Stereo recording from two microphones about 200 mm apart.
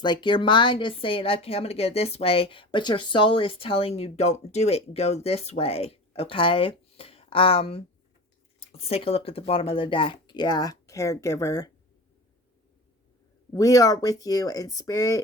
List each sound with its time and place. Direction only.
0.0 s a woman's voice: 25° left (ahead or behind)
13.5 s speech: 15° left (ahead or behind)